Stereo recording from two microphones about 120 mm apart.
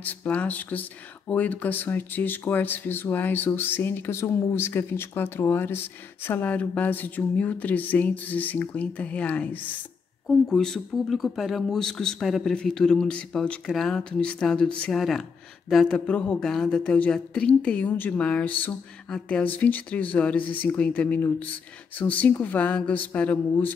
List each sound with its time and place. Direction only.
0.0 s speech: 10° left (ahead or behind)